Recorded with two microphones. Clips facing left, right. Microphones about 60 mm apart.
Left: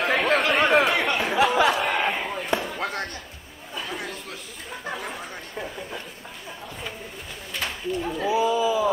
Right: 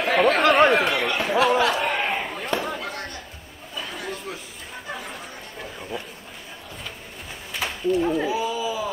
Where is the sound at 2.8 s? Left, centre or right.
Left.